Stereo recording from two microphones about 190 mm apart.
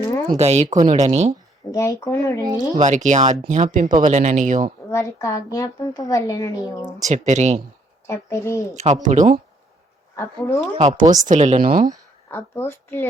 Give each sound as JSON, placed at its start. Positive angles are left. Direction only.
{"t": 0.3, "sound": "speech", "side_deg": -35}
{"t": 1.7, "sound": "a woman's voice", "side_deg": 15}
{"t": 2.7, "sound": "speech", "side_deg": -40}
{"t": 4.9, "sound": "a woman's voice", "side_deg": 15}
{"t": 7.0, "sound": "speech", "side_deg": -40}
{"t": 8.0, "sound": "a woman's voice", "side_deg": 15}
{"t": 8.7, "sound": "speech", "side_deg": -35}
{"t": 10.2, "sound": "a woman's voice", "side_deg": 15}
{"t": 10.8, "sound": "speech", "side_deg": -35}
{"t": 12.3, "sound": "a woman's voice", "side_deg": 10}